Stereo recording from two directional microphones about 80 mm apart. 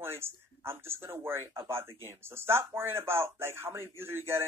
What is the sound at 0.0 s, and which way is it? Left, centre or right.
A man's voice, right.